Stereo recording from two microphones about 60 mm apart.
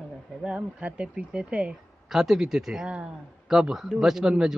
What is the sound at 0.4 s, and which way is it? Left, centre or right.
Speech, centre.